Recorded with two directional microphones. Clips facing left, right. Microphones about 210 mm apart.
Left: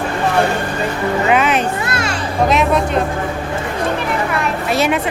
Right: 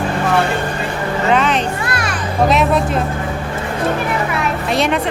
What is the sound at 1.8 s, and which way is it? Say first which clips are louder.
Music: left 1 dB; 25° left (ahead or behind).